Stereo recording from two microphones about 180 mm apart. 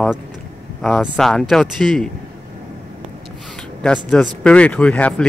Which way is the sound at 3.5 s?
5° left (ahead or behind).